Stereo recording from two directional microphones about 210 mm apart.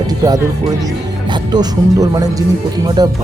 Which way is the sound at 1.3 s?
20° right (ahead or behind).